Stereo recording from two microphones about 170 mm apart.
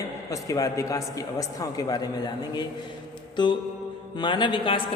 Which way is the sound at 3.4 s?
25° left (ahead or behind).